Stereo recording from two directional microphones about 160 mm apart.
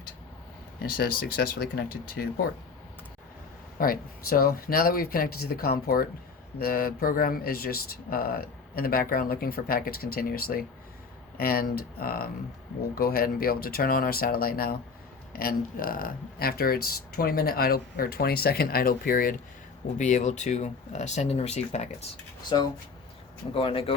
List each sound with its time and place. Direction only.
0.8 s speech: 65° left (ahead or behind)
3.8 s speech: 65° left (ahead or behind)
20.0 s speech: 50° left (ahead or behind)
22.4 s speech: 25° left (ahead or behind)